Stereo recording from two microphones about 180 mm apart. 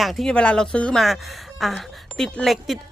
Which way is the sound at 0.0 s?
Centre (ahead or behind).